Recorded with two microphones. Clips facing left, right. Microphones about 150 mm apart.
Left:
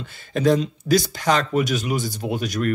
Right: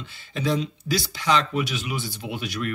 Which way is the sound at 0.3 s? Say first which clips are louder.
Left 6 dB; 45° left (ahead or behind).